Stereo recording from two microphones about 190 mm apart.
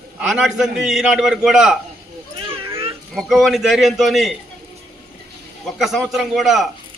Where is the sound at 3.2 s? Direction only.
Centre (ahead or behind).